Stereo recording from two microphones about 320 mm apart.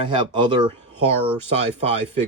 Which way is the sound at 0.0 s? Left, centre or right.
Centre.